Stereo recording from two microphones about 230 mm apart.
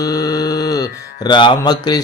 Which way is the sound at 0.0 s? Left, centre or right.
Centre.